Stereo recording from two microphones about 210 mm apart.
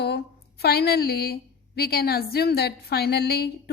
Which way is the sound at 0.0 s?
50° left (ahead or behind).